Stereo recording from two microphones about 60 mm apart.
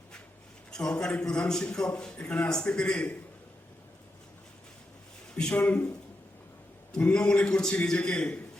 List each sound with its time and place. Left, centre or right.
0.7 s a man's voice: centre
5.3 s speech: centre
5.5 s speech: left
7.0 s a man's voice: centre